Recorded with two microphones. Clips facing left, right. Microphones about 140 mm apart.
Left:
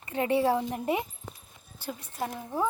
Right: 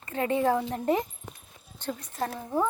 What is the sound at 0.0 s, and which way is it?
A woman's voice, 15° left (ahead or behind).